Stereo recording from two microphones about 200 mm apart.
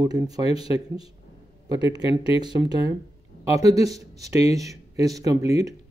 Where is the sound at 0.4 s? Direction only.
30° left (ahead or behind).